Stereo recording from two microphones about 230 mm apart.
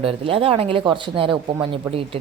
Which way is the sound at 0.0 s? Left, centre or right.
Right.